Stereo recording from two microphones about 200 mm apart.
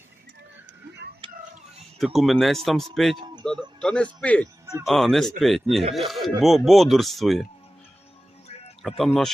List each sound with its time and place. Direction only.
1.2 s music: 25° right (ahead or behind)
2.0 s a man's voice: centre (ahead or behind)
8.8 s speech: centre (ahead or behind)